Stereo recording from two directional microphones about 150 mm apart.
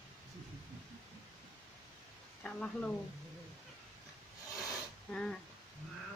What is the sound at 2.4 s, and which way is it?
Speech, 5° left (ahead or behind).